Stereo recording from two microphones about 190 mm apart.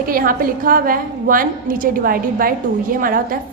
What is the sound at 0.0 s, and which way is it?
A woman's voice, 50° right (ahead or behind).